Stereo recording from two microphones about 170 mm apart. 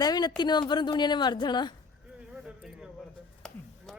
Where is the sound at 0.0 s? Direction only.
25° left (ahead or behind).